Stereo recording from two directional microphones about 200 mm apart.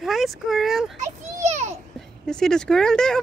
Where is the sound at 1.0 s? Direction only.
35° right (ahead or behind).